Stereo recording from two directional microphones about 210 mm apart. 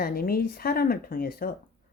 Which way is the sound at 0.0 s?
45° left (ahead or behind).